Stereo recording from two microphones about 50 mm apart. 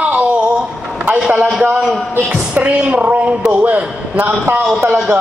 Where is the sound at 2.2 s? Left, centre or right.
Right.